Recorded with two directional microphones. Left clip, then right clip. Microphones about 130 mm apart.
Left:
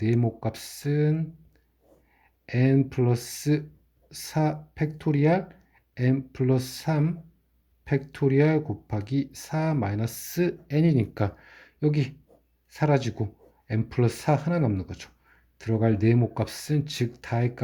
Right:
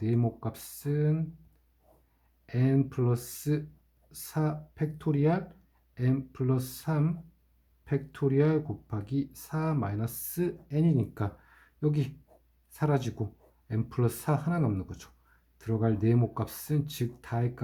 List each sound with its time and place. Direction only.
0.0 s speech: 30° left (ahead or behind)
2.5 s speech: 35° left (ahead or behind)